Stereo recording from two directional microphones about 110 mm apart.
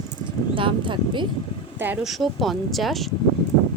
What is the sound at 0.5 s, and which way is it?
Speech, 50° right (ahead or behind).